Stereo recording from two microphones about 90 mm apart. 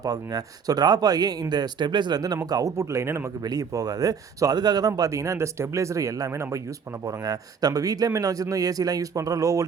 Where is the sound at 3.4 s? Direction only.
45° right (ahead or behind).